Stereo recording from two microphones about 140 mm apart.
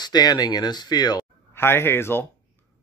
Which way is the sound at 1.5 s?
15° left (ahead or behind).